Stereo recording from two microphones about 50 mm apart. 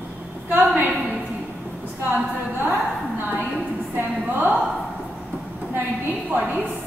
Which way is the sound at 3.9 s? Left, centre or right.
Right.